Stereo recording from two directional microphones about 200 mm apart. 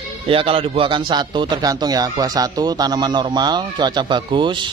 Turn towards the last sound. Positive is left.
turn(degrees=-25)  # may be behind; listen again after turning